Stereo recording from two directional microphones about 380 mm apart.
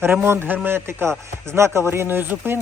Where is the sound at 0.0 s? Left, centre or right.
Centre.